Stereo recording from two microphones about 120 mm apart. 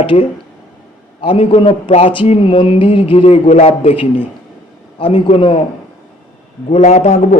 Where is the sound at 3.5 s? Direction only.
65° left (ahead or behind).